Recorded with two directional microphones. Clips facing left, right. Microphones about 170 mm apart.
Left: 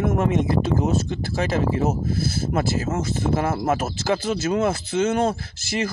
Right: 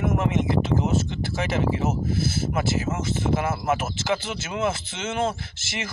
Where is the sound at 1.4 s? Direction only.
35° left (ahead or behind).